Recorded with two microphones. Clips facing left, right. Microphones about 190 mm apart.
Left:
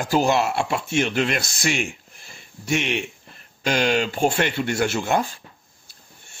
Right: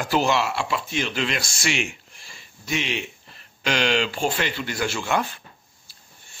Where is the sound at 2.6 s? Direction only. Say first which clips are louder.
Left 4 dB; 60° left (ahead or behind).